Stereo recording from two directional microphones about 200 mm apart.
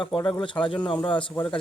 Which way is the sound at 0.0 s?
25° left (ahead or behind).